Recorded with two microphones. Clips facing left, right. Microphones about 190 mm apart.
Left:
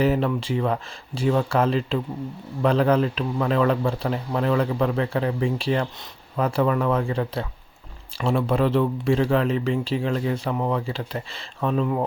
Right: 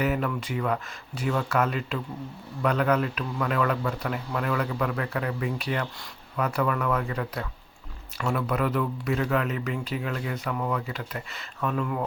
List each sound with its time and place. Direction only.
0.0 s speech: 30° left (ahead or behind)